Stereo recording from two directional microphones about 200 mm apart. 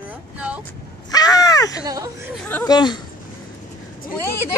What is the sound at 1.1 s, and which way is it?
Crow, 20° left (ahead or behind).